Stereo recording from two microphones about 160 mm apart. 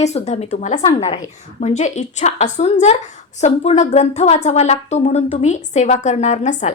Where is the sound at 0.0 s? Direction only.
45° left (ahead or behind).